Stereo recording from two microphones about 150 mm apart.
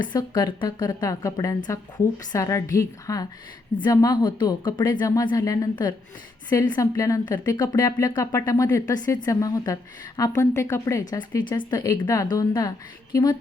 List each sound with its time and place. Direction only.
0.1 s speech: 25° left (ahead or behind)
11.1 s speech: 30° left (ahead or behind)